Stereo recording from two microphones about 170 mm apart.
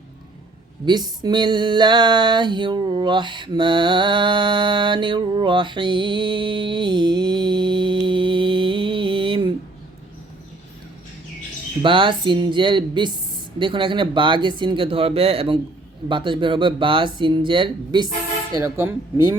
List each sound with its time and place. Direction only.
0.9 s music: 25° right (ahead or behind)
11.8 s music: 30° right (ahead or behind)
18.5 s speech: 15° right (ahead or behind)